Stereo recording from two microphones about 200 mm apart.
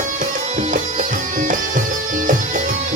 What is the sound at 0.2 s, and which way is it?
Music, 40° right (ahead or behind).